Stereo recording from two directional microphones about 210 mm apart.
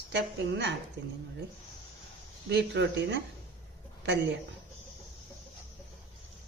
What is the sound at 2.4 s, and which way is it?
Speech, 55° right (ahead or behind).